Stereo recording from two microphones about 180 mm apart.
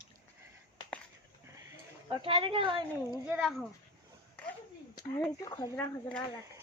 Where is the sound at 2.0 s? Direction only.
30° right (ahead or behind).